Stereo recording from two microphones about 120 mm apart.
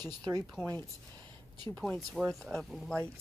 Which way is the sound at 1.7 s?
5° left (ahead or behind).